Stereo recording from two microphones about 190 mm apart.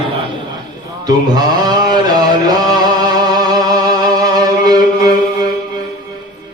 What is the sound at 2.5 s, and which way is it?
Music, 20° right (ahead or behind).